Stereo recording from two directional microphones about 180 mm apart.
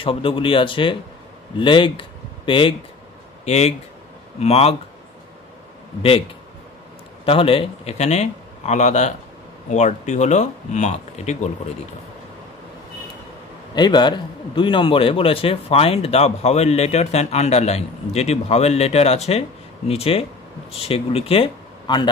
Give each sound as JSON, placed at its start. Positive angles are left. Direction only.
{"t": 0.0, "sound": "a man's voice", "side_deg": 30}
{"t": 7.2, "sound": "a man's voice", "side_deg": 30}
{"t": 13.7, "sound": "a man's voice", "side_deg": 25}